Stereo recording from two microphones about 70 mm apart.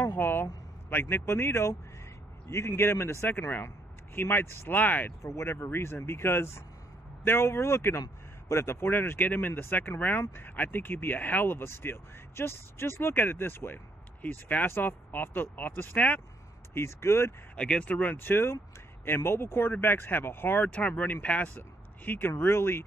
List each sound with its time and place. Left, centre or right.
0.0 s speech: left
5.2 s speech: left
16.7 s speech: left
17.6 s speech: centre
18.1 s speech: left
22.3 s speech: left